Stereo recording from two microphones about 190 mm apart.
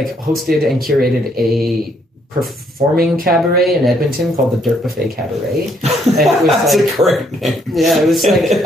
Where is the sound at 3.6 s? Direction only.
Centre (ahead or behind).